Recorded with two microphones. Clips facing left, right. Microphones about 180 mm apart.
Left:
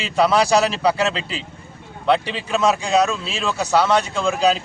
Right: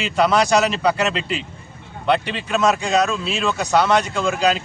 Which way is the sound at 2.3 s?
Centre (ahead or behind).